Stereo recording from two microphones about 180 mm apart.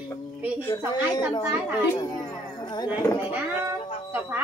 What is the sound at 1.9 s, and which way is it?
Speech, 20° left (ahead or behind).